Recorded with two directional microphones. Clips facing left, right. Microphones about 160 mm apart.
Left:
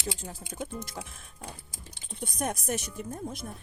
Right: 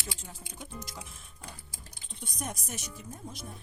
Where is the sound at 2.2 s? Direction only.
60° left (ahead or behind).